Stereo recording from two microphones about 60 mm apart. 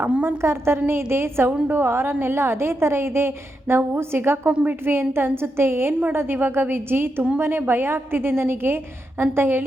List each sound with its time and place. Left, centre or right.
0.3 s a woman's voice: right